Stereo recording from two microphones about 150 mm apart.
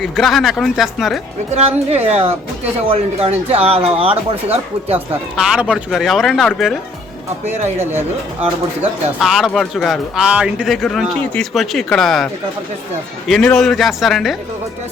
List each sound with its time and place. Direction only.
0.0 s speech: centre (ahead or behind)
1.5 s speech: 45° right (ahead or behind)
4.9 s speech: 5° right (ahead or behind)
7.4 s speech: 45° right (ahead or behind)
9.1 s speech: centre (ahead or behind)